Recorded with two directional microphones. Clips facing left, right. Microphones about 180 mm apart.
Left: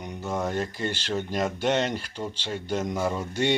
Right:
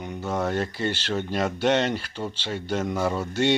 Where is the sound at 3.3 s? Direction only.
15° left (ahead or behind).